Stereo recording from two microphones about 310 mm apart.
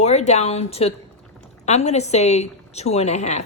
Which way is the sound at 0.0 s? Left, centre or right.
Left.